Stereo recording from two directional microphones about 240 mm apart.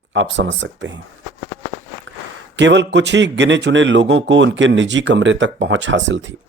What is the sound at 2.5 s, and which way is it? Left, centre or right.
A man's voice, right.